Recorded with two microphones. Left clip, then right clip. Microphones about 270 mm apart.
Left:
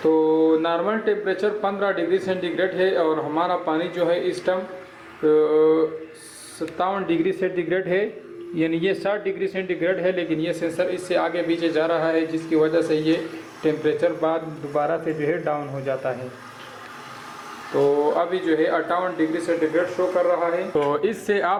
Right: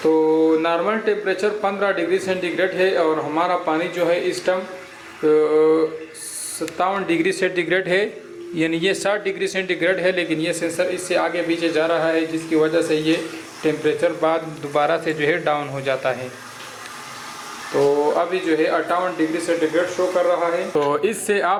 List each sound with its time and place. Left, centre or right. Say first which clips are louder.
0.0 s mantra: right 2 dB; left
0.5 s a man's voice: right 2 dB; centre
5.2 s mantra: right 2 dB; centre
6.7 s a man's voice: right 2 dB; centre
17.7 s a sound: right 2 dB; centre
18.2 s a man's voice: right 2 dB; centre